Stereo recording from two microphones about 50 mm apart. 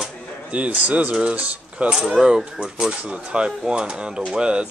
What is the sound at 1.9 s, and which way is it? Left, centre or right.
Speech, centre.